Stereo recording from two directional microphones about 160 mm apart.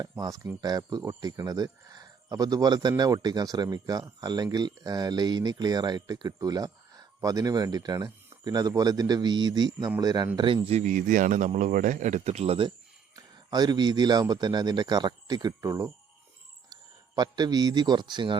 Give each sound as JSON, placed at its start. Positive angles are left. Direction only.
{"t": 0.0, "sound": "a man's voice", "side_deg": -25}
{"t": 17.2, "sound": "speech", "side_deg": -25}